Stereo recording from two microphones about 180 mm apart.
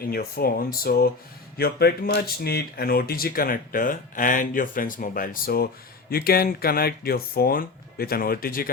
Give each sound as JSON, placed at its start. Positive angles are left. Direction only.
{"t": 0.0, "sound": "speech", "side_deg": 55}